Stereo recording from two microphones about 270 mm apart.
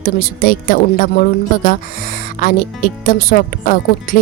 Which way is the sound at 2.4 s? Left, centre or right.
Left.